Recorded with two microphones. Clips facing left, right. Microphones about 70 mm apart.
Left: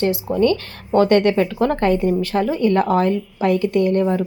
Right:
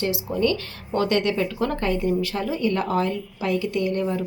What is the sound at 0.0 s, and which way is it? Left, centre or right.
A woman's voice, left.